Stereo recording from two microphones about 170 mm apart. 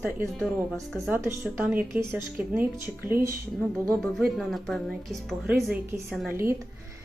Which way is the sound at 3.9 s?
Centre (ahead or behind).